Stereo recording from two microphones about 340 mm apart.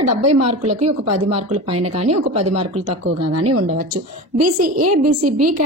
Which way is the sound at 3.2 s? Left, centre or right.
Right.